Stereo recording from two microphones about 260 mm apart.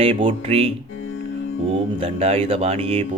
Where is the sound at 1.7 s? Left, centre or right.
Right.